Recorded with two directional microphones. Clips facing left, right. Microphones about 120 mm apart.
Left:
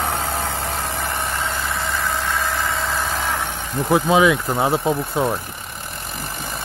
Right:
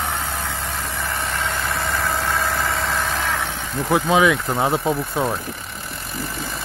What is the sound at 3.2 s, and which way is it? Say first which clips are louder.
Vehicle: even; 15° left (ahead or behind).